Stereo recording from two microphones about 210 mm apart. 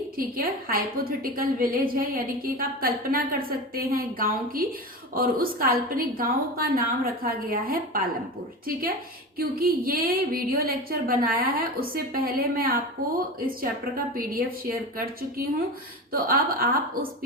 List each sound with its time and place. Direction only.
0.2 s a woman's voice: 45° right (ahead or behind)
9.4 s a woman's voice: 45° right (ahead or behind)